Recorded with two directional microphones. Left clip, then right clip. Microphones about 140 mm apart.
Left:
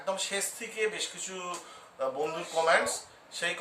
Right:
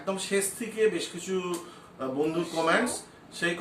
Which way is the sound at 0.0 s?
25° left (ahead or behind).